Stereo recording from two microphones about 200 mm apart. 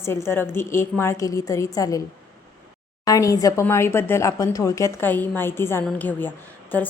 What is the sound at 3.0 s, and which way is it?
A woman's voice, 15° left (ahead or behind).